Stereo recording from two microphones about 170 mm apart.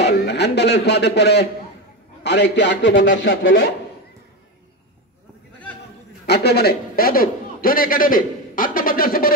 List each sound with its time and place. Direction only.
0.0 s a man's voice: 75° left (ahead or behind)
2.2 s a man's voice: 90° left; by 3.6 s 60° left (ahead or behind)
6.2 s a man's voice: 70° left (ahead or behind)